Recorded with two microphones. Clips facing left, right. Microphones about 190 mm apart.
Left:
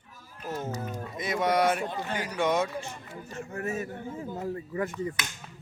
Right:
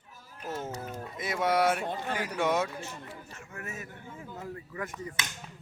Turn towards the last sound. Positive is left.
turn(degrees=30)  # may be behind; listen again after turning